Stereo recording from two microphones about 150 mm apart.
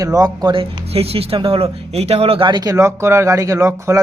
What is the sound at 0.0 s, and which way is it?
Speech, 25° right (ahead or behind).